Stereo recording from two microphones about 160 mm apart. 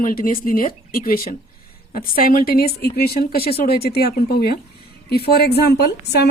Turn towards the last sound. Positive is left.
turn(degrees=90)